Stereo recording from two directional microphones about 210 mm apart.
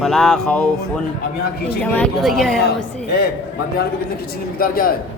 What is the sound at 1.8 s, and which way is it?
Speech, 5° left (ahead or behind).